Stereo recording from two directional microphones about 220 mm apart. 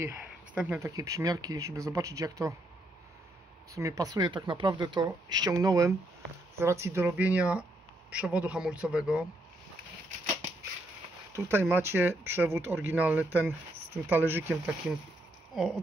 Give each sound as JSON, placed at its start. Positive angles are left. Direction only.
{"t": 0.0, "sound": "speech", "side_deg": -10}
{"t": 3.7, "sound": "speech", "side_deg": -15}
{"t": 11.3, "sound": "speech", "side_deg": -10}